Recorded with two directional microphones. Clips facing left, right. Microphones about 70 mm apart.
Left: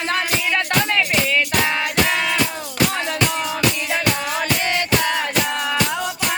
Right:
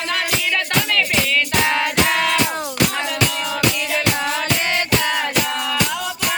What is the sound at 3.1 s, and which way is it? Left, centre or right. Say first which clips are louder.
Music: even; left.